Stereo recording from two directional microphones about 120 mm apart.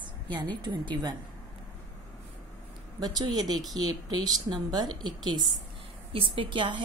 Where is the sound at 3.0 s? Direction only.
35° right (ahead or behind).